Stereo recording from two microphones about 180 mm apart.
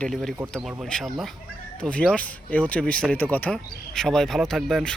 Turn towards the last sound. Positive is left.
turn(degrees=0)  # may be behind; listen again after turning